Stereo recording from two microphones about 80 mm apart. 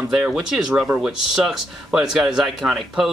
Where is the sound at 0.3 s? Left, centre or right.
Centre.